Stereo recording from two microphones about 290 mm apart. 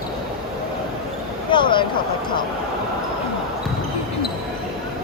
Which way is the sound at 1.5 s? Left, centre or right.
Centre.